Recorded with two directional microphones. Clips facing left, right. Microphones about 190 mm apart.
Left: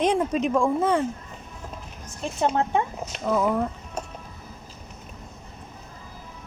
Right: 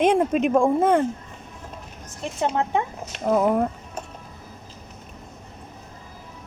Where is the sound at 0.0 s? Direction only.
55° right (ahead or behind).